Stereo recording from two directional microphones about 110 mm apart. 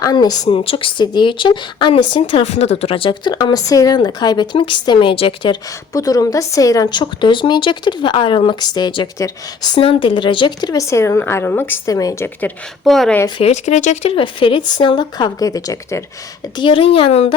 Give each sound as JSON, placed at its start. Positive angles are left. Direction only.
{"t": 0.0, "sound": "speech", "side_deg": 40}
{"t": 0.5, "sound": "speech", "side_deg": 55}
{"t": 2.4, "sound": "speech", "side_deg": 75}
{"t": 5.9, "sound": "speech", "side_deg": 30}
{"t": 7.0, "sound": "speech", "side_deg": 45}
{"t": 9.7, "sound": "speech", "side_deg": 55}
{"t": 11.9, "sound": "speech", "side_deg": 30}
{"t": 12.8, "sound": "speech", "side_deg": 0}
{"t": 13.4, "sound": "speech", "side_deg": 90}
{"t": 14.2, "sound": "speech", "side_deg": 55}
{"t": 16.6, "sound": "a woman's voice", "side_deg": 50}